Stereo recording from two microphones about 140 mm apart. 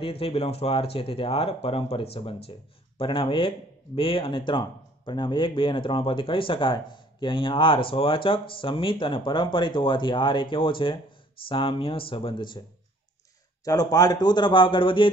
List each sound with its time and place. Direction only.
0.0 s speech: 45° left (ahead or behind)
13.7 s speech: 25° left (ahead or behind)